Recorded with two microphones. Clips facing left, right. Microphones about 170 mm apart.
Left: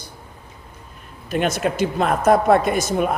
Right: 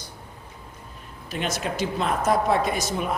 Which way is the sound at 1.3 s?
55° left (ahead or behind).